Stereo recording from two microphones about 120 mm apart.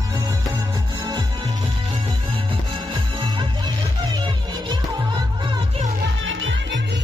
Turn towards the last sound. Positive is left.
turn(degrees=-40)  # may be behind; listen again after turning